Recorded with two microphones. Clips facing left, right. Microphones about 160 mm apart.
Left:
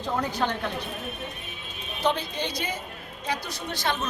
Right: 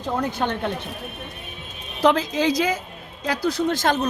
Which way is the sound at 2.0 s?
90° right.